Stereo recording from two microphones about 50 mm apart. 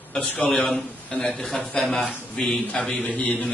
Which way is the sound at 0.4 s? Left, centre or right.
Centre.